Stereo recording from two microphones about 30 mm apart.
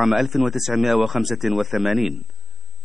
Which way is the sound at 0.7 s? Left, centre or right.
Right.